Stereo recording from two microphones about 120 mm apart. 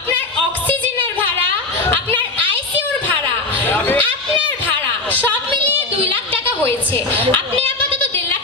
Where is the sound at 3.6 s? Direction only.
15° left (ahead or behind).